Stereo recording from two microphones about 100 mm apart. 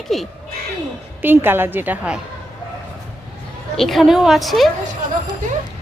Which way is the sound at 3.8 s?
Centre (ahead or behind).